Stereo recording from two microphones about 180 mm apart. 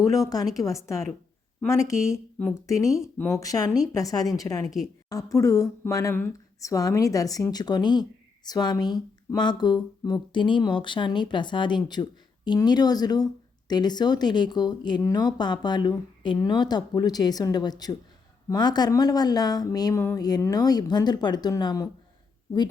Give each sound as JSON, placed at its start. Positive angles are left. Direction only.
{"t": 0.0, "sound": "a woman's voice", "side_deg": 20}